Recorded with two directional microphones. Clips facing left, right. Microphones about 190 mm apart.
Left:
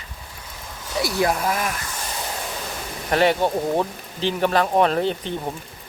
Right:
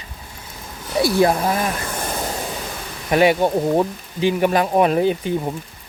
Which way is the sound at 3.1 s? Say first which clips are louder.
Right 3 dB; 15° right (ahead or behind).